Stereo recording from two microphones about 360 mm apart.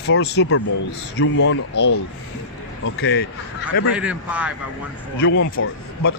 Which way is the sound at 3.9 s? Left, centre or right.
Centre.